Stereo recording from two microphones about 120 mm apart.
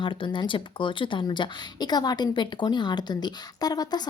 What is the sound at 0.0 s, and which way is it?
Speech, 45° left (ahead or behind).